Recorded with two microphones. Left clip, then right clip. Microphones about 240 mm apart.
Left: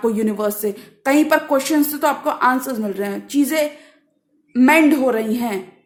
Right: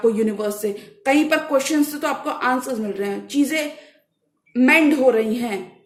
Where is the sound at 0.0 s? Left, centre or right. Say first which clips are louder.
Even; left.